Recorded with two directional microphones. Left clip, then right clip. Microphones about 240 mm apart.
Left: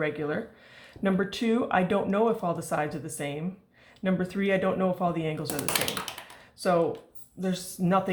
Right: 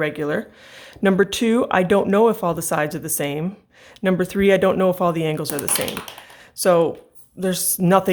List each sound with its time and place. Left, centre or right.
0.0 s speech: right
6.6 s speech: right